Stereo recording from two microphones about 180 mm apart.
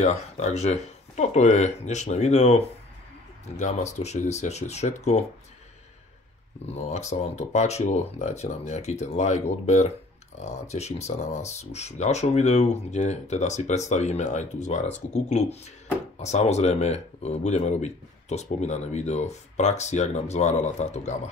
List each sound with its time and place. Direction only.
0.0 s speech: 40° left (ahead or behind)
6.7 s speech: 40° left (ahead or behind)